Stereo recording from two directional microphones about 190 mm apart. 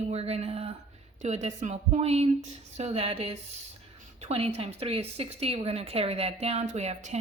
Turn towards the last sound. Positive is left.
turn(degrees=-35)  # may be behind; listen again after turning